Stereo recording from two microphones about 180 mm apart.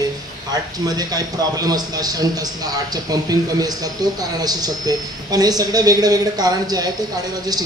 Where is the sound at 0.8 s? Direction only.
20° right (ahead or behind).